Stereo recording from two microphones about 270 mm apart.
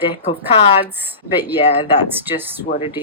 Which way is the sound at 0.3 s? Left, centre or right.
Left.